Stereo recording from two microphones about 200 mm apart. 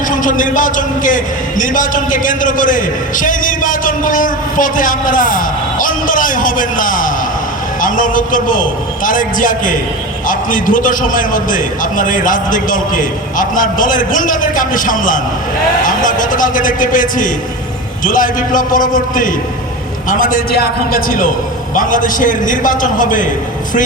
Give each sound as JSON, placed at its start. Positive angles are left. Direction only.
{"t": 0.1, "sound": "a man's voice", "side_deg": 40}